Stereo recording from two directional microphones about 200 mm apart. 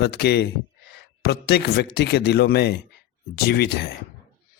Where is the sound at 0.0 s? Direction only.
55° left (ahead or behind).